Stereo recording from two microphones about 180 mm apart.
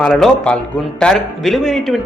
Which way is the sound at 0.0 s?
5° left (ahead or behind).